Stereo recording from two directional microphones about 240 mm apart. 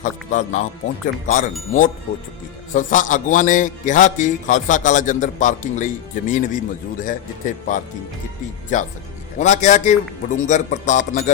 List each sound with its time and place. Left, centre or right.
0.0 s a man's voice: left
2.7 s a man's voice: left